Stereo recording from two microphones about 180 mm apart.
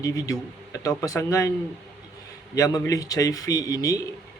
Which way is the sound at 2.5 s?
20° left (ahead or behind).